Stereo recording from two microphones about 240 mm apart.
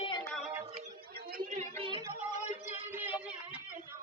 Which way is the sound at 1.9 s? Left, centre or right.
Centre.